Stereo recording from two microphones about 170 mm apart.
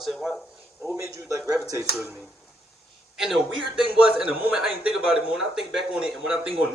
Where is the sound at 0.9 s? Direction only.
20° right (ahead or behind).